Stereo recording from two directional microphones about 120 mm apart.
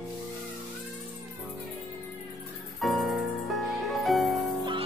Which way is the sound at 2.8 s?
Centre (ahead or behind).